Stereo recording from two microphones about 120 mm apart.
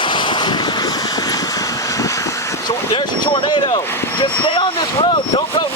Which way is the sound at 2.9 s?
40° left (ahead or behind).